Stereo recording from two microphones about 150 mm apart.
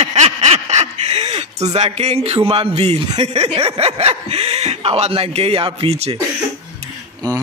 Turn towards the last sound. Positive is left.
turn(degrees=-30)  # may be behind; listen again after turning